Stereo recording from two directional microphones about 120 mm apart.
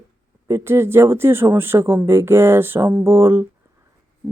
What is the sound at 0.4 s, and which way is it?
Speech, 20° right (ahead or behind).